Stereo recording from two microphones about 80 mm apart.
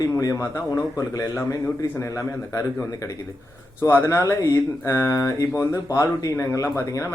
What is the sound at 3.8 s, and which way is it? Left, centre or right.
Speech, left.